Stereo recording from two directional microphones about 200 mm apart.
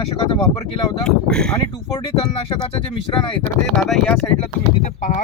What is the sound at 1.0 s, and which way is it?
Speech, 5° left (ahead or behind).